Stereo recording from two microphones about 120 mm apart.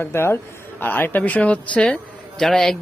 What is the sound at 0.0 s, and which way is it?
A man's voice, 20° left (ahead or behind).